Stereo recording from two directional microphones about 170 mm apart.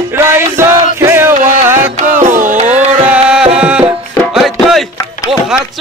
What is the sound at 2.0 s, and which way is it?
Music, 50° right (ahead or behind).